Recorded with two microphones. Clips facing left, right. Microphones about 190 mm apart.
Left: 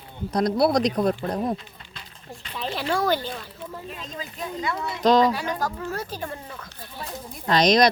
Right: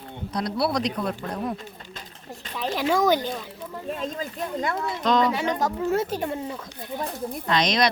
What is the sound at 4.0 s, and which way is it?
Speech, 50° right (ahead or behind).